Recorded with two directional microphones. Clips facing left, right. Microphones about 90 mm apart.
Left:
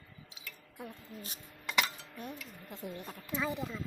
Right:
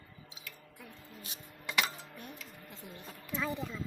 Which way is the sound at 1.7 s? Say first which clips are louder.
Left 1 dB; 10° right (ahead or behind).